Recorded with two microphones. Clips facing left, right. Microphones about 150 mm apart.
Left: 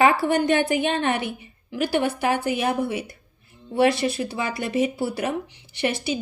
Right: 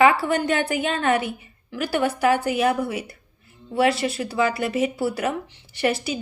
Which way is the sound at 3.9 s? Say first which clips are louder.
Even; 30° right (ahead or behind).